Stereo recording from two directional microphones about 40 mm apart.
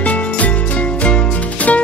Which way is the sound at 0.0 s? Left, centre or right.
Left.